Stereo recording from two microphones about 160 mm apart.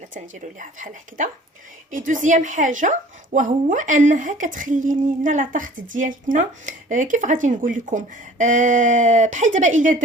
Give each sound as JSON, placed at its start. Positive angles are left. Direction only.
{"t": 0.6, "sound": "a woman's voice", "side_deg": -55}